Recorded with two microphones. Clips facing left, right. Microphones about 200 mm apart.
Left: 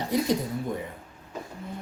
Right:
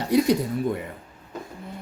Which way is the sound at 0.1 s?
70° right (ahead or behind).